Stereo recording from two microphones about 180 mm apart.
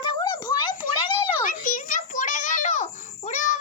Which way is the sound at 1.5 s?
45° left (ahead or behind).